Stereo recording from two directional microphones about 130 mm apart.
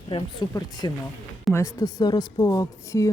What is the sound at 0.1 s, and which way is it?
Speech, 50° left (ahead or behind).